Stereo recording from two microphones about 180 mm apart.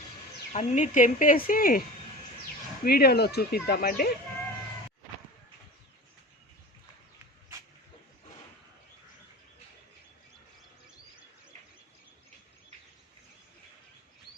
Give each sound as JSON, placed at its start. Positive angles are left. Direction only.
{"t": 0.5, "sound": "speech", "side_deg": 45}
{"t": 2.8, "sound": "speech", "side_deg": 60}